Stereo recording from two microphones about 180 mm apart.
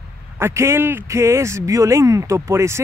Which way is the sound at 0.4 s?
15° right (ahead or behind).